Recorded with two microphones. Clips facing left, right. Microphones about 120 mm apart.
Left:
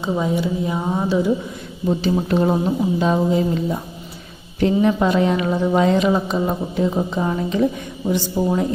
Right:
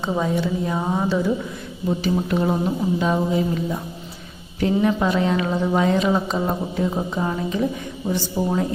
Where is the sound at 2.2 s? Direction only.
30° left (ahead or behind).